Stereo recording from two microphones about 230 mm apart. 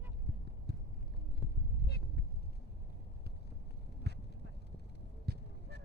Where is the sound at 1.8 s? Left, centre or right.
Left.